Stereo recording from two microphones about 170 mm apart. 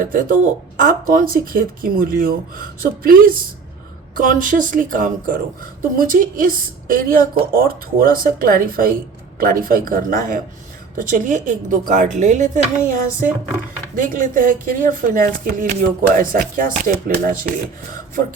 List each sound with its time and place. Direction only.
0.0 s speech: 55° right (ahead or behind)